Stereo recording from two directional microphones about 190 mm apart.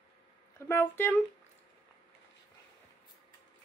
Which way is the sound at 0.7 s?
10° left (ahead or behind).